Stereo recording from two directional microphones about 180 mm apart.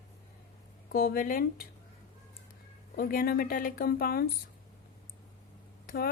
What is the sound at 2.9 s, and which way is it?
A woman's voice, 55° left (ahead or behind).